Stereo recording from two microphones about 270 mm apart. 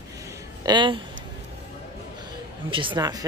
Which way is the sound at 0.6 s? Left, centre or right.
Centre.